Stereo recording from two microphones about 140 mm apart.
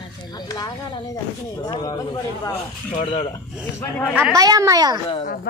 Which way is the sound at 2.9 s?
40° left (ahead or behind).